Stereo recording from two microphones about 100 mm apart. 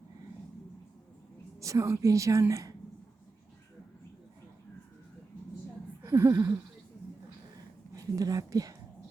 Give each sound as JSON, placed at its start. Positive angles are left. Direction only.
{"t": 1.6, "sound": "a woman's voice", "side_deg": -30}
{"t": 6.0, "sound": "a sound", "side_deg": -25}
{"t": 7.9, "sound": "speech", "side_deg": -40}